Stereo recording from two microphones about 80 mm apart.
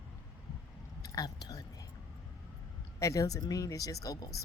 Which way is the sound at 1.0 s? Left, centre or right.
Left.